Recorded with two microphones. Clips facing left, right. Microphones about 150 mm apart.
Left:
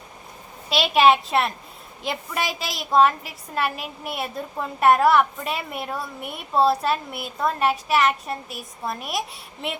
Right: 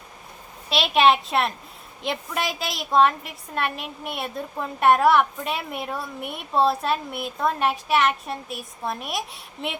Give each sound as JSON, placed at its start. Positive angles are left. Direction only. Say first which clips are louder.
{"t": 0.7, "sound": "a woman's voice", "louder": "left 1 dB", "side_deg": 0}